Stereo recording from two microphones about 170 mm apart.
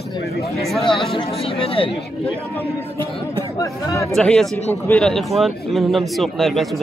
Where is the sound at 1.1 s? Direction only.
35° left (ahead or behind).